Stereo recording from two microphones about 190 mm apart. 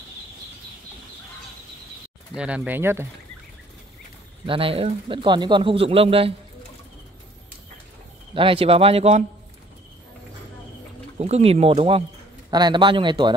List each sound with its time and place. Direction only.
2.3 s speech: 5° right (ahead or behind)
4.5 s speech: 30° right (ahead or behind)
8.4 s speech: 30° right (ahead or behind)
11.1 s speech: 35° right (ahead or behind)